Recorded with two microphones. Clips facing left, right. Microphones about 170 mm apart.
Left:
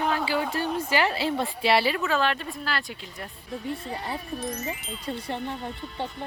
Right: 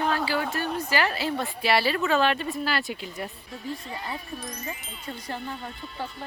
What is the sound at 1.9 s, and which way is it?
Speech, centre (ahead or behind).